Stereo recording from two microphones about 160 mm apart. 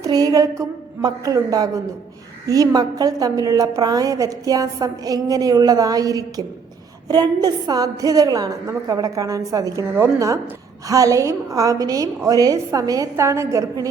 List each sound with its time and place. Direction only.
0.0 s a woman's voice: 25° right (ahead or behind)